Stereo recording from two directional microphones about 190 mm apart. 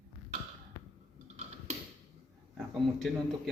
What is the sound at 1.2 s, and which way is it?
Typing, 35° right (ahead or behind).